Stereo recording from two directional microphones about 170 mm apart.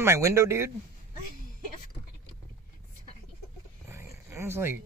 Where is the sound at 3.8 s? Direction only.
15° right (ahead or behind).